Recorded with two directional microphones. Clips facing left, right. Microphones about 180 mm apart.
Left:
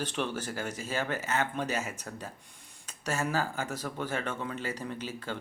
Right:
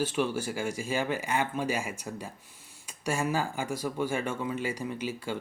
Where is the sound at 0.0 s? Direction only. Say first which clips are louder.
Right 4 dB; 10° right (ahead or behind).